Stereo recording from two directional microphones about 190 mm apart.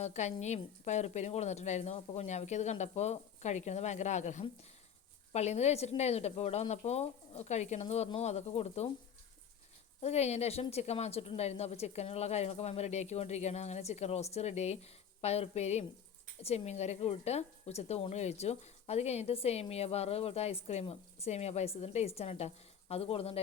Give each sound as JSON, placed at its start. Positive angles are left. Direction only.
{"t": 0.0, "sound": "speech", "side_deg": 35}
{"t": 10.0, "sound": "speech", "side_deg": 35}